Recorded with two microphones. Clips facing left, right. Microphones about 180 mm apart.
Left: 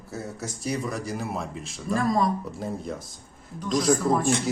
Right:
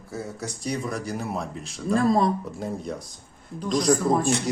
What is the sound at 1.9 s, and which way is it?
Speech, 30° right (ahead or behind).